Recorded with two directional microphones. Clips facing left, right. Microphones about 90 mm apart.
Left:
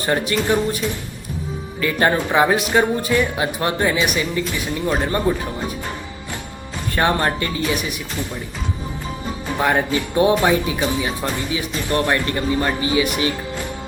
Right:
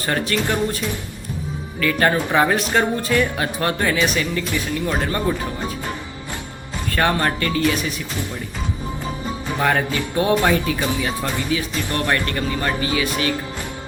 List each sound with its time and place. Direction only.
0.0 s speech: 20° left (ahead or behind)
1.8 s speech: 20° left (ahead or behind)
6.9 s speech: 20° left (ahead or behind)
9.6 s speech: 20° left (ahead or behind)